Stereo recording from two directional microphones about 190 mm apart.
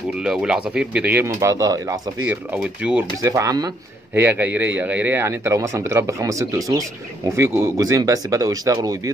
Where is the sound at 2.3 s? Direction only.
10° right (ahead or behind).